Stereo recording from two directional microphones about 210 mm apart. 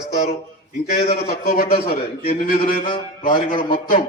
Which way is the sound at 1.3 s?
45° left (ahead or behind).